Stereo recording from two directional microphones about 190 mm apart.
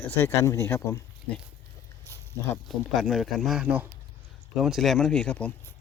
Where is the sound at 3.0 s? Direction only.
Centre (ahead or behind).